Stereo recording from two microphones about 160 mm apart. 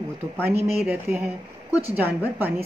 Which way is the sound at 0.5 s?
40° right (ahead or behind).